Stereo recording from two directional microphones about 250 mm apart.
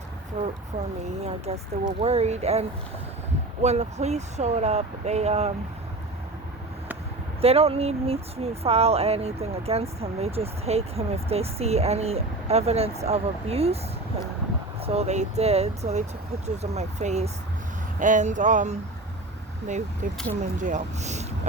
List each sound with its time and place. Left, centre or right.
0.4 s speech: right
7.4 s speech: right
14.8 s speech: right
20.6 s speech: right